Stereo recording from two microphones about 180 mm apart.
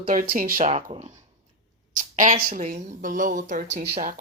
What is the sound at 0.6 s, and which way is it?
Speech, 35° right (ahead or behind).